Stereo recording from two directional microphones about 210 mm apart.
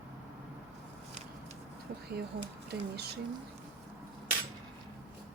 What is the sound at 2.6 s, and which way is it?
Speech, 50° right (ahead or behind).